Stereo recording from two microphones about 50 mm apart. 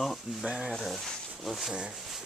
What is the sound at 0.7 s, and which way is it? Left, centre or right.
Speech, centre.